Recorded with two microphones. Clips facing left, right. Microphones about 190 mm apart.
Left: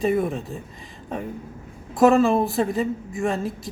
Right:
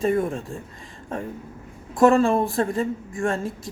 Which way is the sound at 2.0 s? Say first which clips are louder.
Left 1 dB; 5° left (ahead or behind).